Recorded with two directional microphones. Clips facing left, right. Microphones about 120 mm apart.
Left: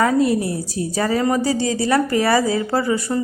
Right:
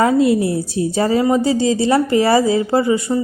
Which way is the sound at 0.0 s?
25° right (ahead or behind).